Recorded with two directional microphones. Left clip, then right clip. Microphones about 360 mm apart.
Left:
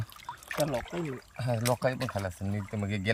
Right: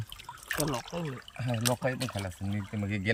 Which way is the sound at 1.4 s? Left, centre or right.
Centre.